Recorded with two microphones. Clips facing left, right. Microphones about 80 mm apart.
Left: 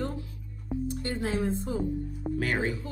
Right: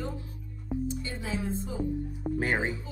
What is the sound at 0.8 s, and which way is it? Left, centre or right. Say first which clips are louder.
Speech: left 3 dB; left.